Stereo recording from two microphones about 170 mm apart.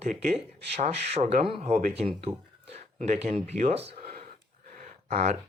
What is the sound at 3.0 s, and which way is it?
Speech, 45° right (ahead or behind).